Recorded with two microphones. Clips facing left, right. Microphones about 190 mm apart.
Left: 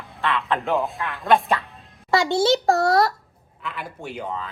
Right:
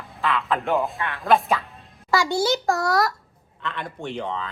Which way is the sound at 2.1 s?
25° left (ahead or behind).